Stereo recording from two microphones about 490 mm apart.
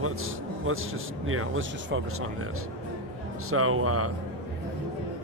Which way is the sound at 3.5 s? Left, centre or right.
Right.